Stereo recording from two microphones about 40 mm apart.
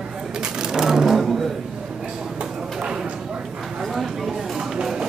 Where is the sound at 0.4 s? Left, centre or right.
Centre.